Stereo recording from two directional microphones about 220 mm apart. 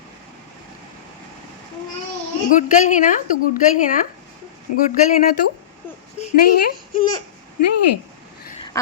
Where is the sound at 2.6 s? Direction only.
35° left (ahead or behind).